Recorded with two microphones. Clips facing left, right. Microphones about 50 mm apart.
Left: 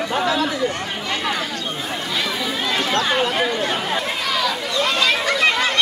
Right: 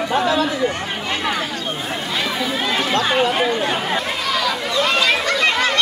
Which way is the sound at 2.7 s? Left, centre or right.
Centre.